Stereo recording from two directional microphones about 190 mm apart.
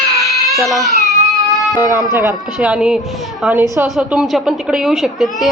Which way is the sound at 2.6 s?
5° right (ahead or behind).